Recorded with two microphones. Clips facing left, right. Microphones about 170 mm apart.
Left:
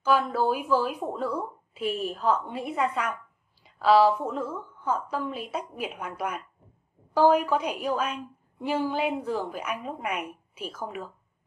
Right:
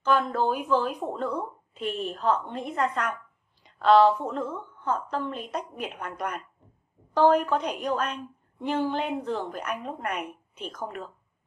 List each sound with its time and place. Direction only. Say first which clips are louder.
0.0 s a woman's voice: even; 5° left (ahead or behind)